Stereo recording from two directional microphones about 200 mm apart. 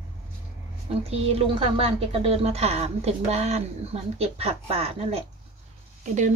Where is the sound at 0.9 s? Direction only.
30° right (ahead or behind).